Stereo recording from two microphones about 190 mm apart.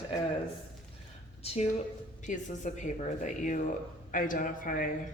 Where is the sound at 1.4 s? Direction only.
30° left (ahead or behind).